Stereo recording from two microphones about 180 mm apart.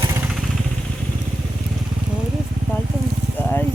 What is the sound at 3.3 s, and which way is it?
Sizzle, 10° left (ahead or behind).